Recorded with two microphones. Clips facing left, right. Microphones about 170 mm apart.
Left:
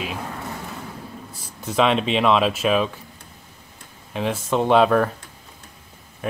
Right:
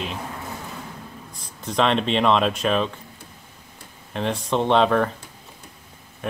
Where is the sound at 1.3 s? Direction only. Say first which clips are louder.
Left 2 dB; 5° left (ahead or behind).